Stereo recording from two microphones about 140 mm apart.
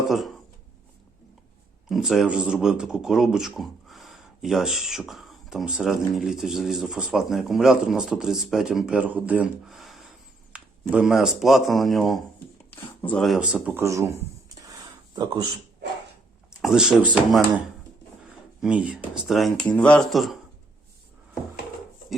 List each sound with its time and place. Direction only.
1.9 s speech: centre (ahead or behind)
12.7 s speech: 15° left (ahead or behind)
13.2 s speech: 5° right (ahead or behind)
14.6 s a sound: 30° right (ahead or behind)
16.6 s speech: 5° right (ahead or behind)
18.6 s speech: 10° right (ahead or behind)